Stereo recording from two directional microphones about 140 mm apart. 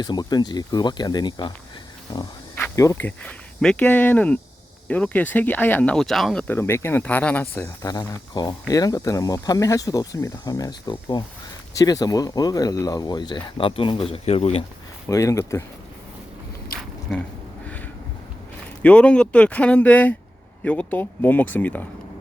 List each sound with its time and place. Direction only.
0.0 s speech: 30° left (ahead or behind)
2.7 s speech: 20° left (ahead or behind); by 6.4 s centre (ahead or behind)
6.5 s speech: 20° left (ahead or behind)
8.3 s speech: 30° left (ahead or behind); by 14.6 s 45° left (ahead or behind)
15.1 s speech: 20° left (ahead or behind)
18.8 s speech: 10° left (ahead or behind)